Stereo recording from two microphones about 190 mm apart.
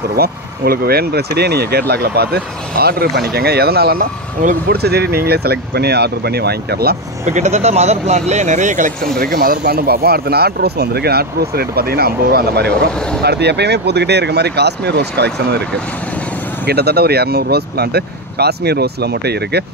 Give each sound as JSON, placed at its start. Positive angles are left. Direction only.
{"t": 0.1, "sound": "speech", "side_deg": -55}
{"t": 7.2, "sound": "speech", "side_deg": -40}
{"t": 12.9, "sound": "speech", "side_deg": 5}
{"t": 13.2, "sound": "speech", "side_deg": -60}
{"t": 16.6, "sound": "speech", "side_deg": -55}